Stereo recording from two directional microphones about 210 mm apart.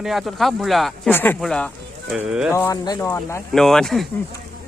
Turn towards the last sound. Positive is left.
turn(degrees=0)  # may be behind; listen again after turning